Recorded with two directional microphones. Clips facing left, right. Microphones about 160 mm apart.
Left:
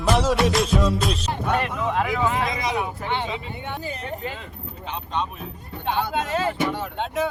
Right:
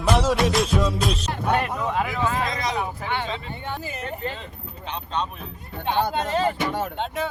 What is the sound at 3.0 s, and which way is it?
Speech, 20° left (ahead or behind).